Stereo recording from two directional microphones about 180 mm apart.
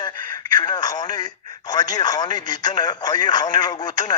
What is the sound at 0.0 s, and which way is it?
Speech, 20° left (ahead or behind).